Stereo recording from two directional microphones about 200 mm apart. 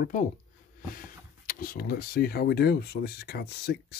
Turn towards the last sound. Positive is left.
turn(degrees=55)  # may be behind; listen again after turning